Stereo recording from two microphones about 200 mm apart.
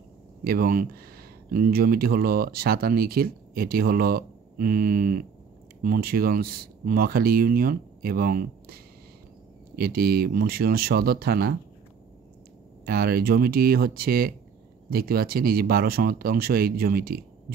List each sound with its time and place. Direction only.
0.4 s speech: 45° right (ahead or behind)
12.8 s speech: 50° right (ahead or behind)